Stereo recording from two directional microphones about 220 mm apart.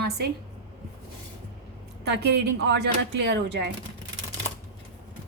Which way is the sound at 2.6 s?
50° right (ahead or behind).